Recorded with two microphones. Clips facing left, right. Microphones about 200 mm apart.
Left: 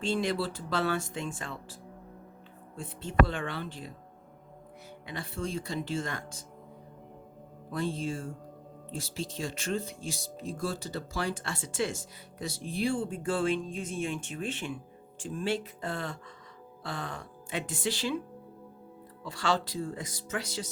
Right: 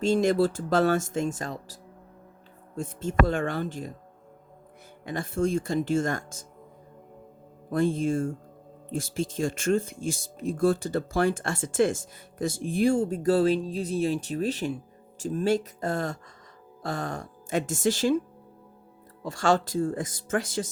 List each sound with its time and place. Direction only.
0.0 s speech: 45° right (ahead or behind)
5.0 s speech: 45° right (ahead or behind)
7.7 s speech: 50° right (ahead or behind)
19.2 s speech: 45° right (ahead or behind)